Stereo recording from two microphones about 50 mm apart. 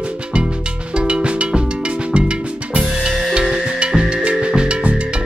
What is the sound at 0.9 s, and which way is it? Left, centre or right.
Cowbell, right.